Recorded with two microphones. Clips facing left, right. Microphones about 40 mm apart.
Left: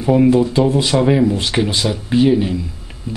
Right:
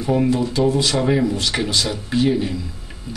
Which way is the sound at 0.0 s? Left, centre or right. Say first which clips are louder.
Left 6 dB; centre.